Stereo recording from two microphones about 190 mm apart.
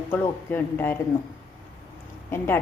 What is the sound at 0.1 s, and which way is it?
Speech, 10° left (ahead or behind).